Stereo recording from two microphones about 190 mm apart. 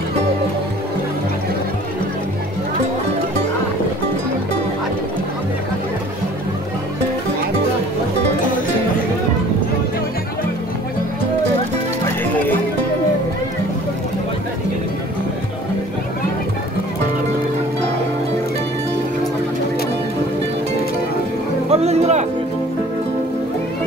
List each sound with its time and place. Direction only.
12.2 s music: 10° left (ahead or behind)
21.6 s music: 35° right (ahead or behind)